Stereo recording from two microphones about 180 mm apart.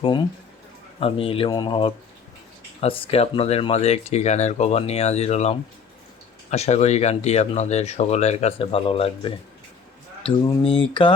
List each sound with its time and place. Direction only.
0.9 s speech: 30° left (ahead or behind)